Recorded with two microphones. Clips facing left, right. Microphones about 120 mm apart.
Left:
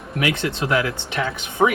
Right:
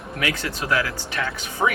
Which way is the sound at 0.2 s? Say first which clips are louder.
Left 5 dB; 25° left (ahead or behind).